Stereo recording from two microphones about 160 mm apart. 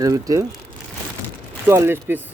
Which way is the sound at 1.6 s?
15° right (ahead or behind).